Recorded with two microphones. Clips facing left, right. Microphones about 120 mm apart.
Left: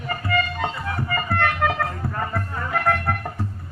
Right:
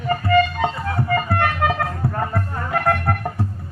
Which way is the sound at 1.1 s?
45° right (ahead or behind).